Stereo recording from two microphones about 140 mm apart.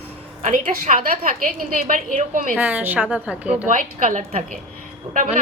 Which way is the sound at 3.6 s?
70° right (ahead or behind).